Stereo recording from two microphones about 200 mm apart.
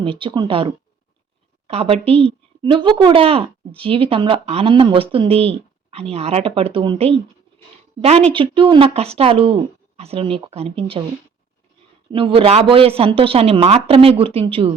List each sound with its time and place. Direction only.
0.0 s speech: 25° right (ahead or behind)
8.3 s speech: 25° right (ahead or behind)
12.1 s speech: 25° right (ahead or behind)